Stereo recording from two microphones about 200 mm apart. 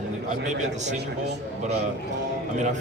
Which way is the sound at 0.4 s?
35° right (ahead or behind).